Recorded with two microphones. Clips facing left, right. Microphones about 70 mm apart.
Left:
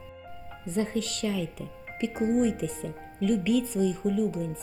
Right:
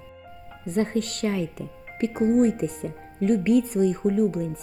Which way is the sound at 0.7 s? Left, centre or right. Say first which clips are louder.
Right 4 dB; right.